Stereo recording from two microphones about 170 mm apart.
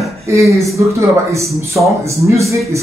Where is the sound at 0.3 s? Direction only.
15° right (ahead or behind).